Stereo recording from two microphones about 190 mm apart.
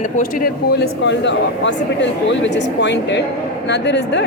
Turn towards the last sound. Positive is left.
turn(degrees=65)  # may be behind; listen again after turning